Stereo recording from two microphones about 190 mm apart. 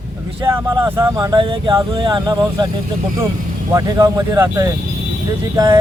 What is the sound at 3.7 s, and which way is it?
Speech, 20° right (ahead or behind).